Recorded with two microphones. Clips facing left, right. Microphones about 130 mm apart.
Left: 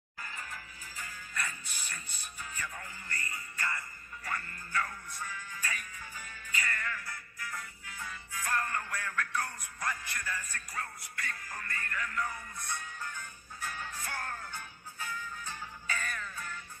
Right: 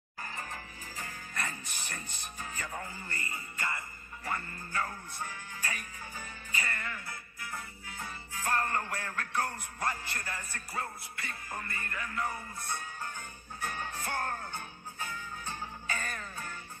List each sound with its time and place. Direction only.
0.2 s music: 40° right (ahead or behind)
2.3 s speech: 40° right (ahead or behind); by 4.6 s 25° right (ahead or behind)
4.7 s music: 40° right (ahead or behind)
10.7 s music: 25° right (ahead or behind)
13.0 s music: 55° right (ahead or behind)
16.0 s music: 40° right (ahead or behind)